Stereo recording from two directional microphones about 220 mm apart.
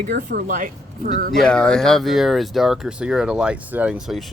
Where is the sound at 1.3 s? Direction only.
5° left (ahead or behind).